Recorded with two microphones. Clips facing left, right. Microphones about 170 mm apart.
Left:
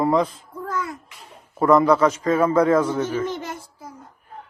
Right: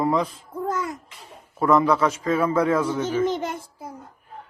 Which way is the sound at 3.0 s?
10° right (ahead or behind).